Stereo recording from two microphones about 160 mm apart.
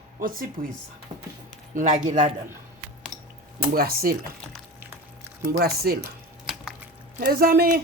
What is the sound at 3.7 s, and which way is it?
Speech, 70° right (ahead or behind).